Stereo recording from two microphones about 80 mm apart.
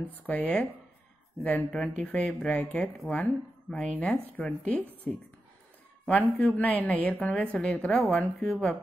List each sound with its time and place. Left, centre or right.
0.0 s a woman's voice: left
1.7 s speech: centre
4.4 s speech: centre
5.1 s speech: centre
6.0 s a woman's voice: centre